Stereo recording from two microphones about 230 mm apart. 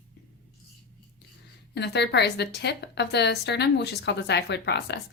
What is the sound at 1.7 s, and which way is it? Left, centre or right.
A woman's voice, left.